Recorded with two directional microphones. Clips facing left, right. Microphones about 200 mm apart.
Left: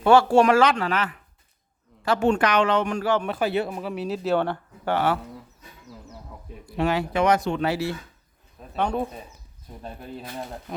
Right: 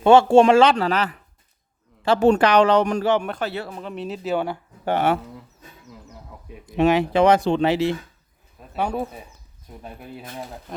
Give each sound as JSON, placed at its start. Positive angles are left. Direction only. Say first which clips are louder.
{"t": 0.0, "sound": "speech", "louder": "right 4 dB", "side_deg": -25}
{"t": 3.2, "sound": "speech", "louder": "left 3 dB", "side_deg": 5}
{"t": 4.4, "sound": "speech", "louder": "even", "side_deg": -10}
{"t": 6.7, "sound": "speech", "louder": "right 6 dB", "side_deg": -20}
{"t": 8.7, "sound": "speech", "louder": "even", "side_deg": -5}